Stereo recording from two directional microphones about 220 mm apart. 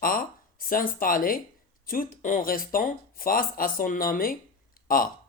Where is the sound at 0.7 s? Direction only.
40° left (ahead or behind).